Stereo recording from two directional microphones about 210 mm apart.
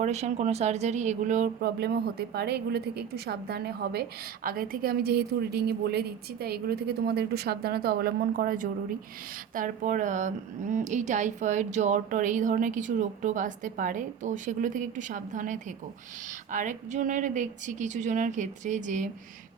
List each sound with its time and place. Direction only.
0.0 s a woman's voice: 30° right (ahead or behind)